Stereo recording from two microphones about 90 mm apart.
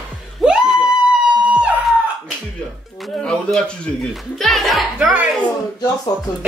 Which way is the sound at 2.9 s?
Centre (ahead or behind).